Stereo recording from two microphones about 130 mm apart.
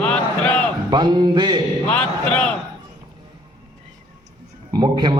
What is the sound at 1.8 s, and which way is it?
Speech, 10° left (ahead or behind).